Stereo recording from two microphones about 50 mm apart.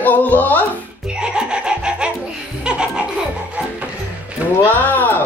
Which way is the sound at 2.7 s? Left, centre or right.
Centre.